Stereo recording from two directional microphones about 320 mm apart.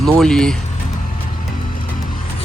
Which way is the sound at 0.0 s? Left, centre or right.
Centre.